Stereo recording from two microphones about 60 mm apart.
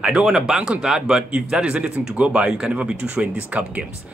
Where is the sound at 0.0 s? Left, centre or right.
Centre.